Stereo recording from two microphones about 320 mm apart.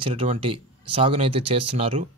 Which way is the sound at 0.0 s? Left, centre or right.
Centre.